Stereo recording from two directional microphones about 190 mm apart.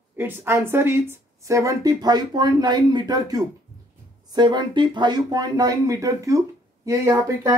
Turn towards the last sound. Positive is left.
turn(degrees=-15)  # may be behind; listen again after turning